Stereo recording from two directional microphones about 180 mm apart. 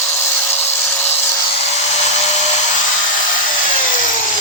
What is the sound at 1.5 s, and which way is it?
Hair dryer, 35° left (ahead or behind).